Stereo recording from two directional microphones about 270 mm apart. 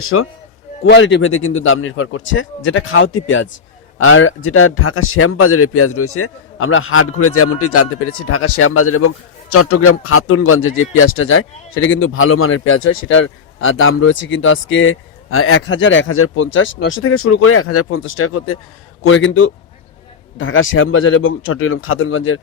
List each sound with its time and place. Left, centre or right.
0.0 s a man's voice: left
0.9 s a man's voice: left